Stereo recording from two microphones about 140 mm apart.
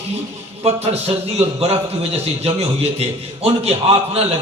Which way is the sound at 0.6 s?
45° right (ahead or behind).